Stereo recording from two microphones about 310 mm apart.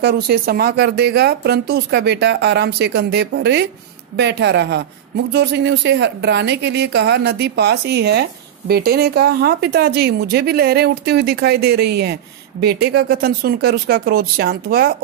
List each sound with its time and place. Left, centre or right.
0.0 s speech: right